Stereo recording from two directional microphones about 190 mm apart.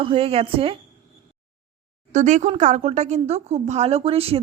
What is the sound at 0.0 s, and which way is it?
Speech, 30° right (ahead or behind).